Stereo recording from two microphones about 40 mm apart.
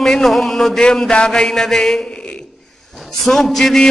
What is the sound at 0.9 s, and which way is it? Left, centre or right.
Mantra, left.